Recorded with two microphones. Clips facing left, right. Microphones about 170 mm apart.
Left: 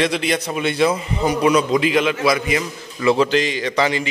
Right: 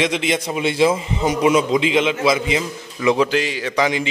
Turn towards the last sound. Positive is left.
turn(degrees=-10)  # may be behind; listen again after turning